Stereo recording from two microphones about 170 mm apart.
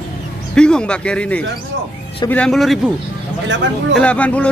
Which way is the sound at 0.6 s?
5° left (ahead or behind).